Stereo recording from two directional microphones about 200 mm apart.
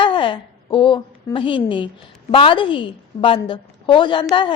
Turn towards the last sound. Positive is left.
turn(degrees=25)  # may be behind; listen again after turning